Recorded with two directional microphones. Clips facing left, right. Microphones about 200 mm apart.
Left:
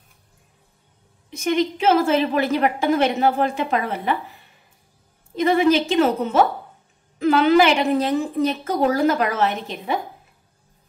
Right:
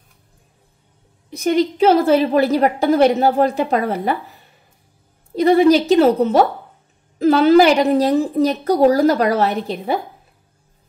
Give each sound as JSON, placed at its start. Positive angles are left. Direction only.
{"t": 1.3, "sound": "a woman's voice", "side_deg": -35}
{"t": 5.3, "sound": "a woman's voice", "side_deg": -35}